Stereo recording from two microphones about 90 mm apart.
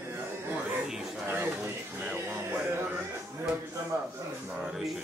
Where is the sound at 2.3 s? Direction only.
25° right (ahead or behind).